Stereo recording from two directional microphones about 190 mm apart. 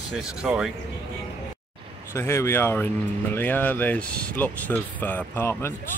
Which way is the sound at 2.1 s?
15° left (ahead or behind).